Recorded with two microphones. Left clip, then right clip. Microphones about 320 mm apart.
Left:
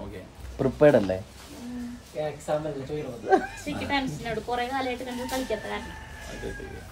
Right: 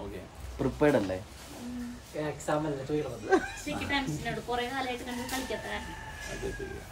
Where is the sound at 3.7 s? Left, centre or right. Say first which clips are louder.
Left 2 dB; centre.